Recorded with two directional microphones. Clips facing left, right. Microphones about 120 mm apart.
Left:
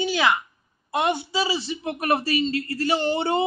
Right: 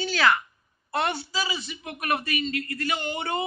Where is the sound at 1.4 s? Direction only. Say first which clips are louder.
Left 7 dB; 30° left (ahead or behind).